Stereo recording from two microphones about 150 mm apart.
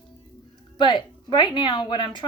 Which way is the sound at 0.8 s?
30° left (ahead or behind).